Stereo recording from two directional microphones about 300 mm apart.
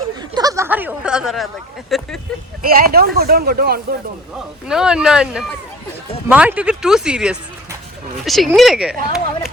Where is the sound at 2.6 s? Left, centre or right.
Right.